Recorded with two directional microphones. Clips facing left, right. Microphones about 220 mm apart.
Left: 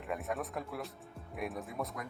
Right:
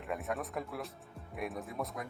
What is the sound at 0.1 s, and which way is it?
Speech, centre (ahead or behind).